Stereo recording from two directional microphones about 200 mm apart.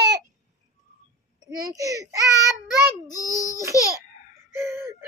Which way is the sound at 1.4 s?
15° right (ahead or behind).